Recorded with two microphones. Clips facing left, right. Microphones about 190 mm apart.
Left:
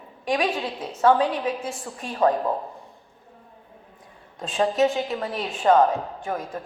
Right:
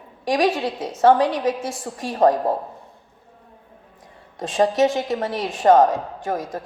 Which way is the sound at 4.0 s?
90° right.